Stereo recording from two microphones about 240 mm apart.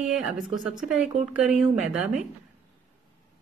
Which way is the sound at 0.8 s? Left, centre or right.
Centre.